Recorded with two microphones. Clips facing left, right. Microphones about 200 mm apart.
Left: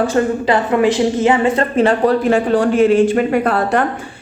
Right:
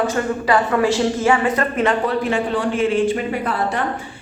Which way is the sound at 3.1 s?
65° left (ahead or behind).